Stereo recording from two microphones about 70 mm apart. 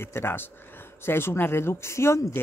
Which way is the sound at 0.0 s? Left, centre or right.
Left.